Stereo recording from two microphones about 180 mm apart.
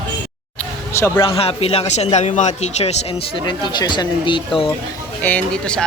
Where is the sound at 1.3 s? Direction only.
35° left (ahead or behind).